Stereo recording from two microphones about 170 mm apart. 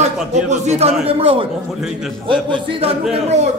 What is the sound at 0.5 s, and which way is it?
A man's voice, 40° right (ahead or behind).